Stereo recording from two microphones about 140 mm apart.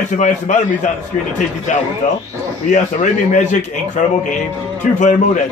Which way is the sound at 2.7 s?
65° left (ahead or behind).